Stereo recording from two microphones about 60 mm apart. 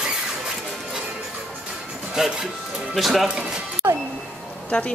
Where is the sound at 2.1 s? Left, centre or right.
Centre.